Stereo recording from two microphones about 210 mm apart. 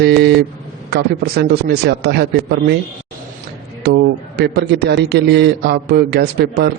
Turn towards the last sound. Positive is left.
turn(degrees=-50)  # may be behind; listen again after turning